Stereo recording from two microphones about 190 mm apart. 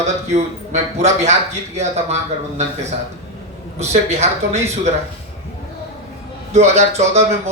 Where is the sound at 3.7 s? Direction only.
35° right (ahead or behind).